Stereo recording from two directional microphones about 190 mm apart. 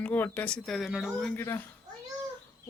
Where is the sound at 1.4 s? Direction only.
10° left (ahead or behind).